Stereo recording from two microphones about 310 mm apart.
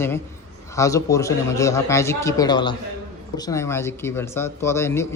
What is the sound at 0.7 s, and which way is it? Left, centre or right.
Speech, centre.